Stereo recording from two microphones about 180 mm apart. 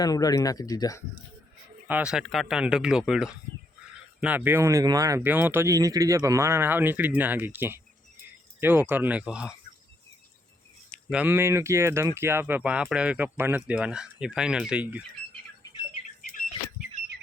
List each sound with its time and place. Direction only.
0.0 s speech: 20° left (ahead or behind)
1.9 s speech: 5° right (ahead or behind)
11.1 s speech: 10° right (ahead or behind)